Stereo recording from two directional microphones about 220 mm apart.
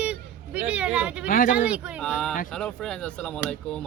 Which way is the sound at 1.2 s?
40° left (ahead or behind).